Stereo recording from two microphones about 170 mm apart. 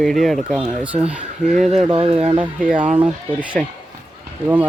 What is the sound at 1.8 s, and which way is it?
Speech, 30° right (ahead or behind).